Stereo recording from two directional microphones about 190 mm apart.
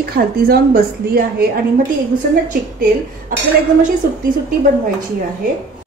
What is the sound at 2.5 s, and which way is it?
Speech, 45° right (ahead or behind).